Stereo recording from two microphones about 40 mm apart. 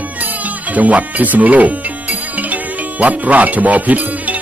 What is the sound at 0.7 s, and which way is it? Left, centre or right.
Speech, right.